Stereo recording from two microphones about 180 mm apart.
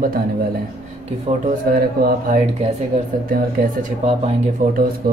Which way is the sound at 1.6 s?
55° right (ahead or behind).